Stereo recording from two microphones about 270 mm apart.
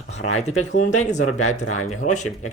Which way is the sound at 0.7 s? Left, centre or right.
Left.